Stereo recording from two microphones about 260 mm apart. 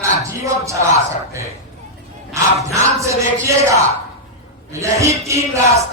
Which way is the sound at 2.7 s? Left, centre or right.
Centre.